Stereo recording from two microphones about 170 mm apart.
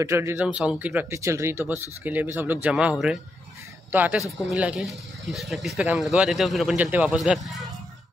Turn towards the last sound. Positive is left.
turn(degrees=0)  # may be behind; listen again after turning